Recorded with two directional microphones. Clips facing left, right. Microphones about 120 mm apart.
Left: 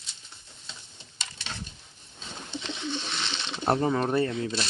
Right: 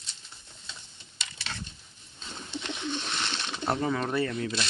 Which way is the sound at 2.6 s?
15° right (ahead or behind).